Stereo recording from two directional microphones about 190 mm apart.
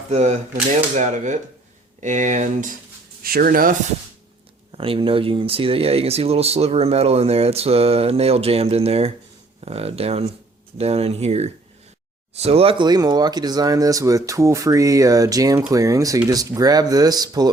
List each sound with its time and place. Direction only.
0.1 s speech: 35° right (ahead or behind)
3.2 s speech: 50° right (ahead or behind)
4.7 s speech: 30° right (ahead or behind)